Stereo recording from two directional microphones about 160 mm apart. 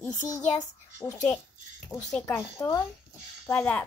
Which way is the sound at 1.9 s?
20° left (ahead or behind).